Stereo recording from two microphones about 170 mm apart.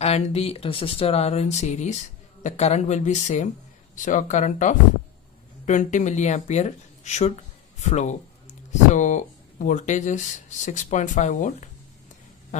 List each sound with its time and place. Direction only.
0.0 s speech: 35° left (ahead or behind)